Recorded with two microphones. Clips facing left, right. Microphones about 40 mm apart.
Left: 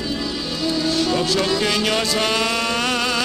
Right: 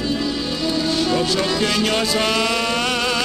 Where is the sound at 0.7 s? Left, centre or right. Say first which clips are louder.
Even; centre.